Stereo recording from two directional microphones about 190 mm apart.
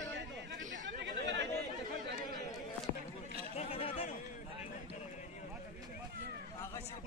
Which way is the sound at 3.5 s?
30° left (ahead or behind).